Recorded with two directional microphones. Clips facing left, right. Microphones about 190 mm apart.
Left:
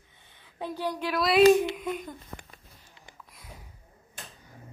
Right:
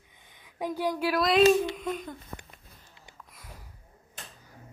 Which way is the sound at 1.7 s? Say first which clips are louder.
Even; 5° left (ahead or behind).